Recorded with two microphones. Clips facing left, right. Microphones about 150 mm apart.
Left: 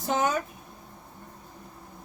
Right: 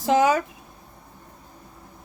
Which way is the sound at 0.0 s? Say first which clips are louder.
Right 7 dB; 90° right.